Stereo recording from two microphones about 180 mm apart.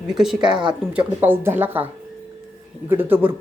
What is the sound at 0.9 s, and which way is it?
Speech, 10° right (ahead or behind).